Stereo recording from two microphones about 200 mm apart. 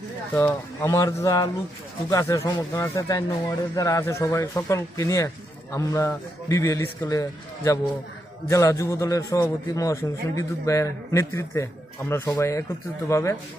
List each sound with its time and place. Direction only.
0.3 s a man's voice: 10° left (ahead or behind)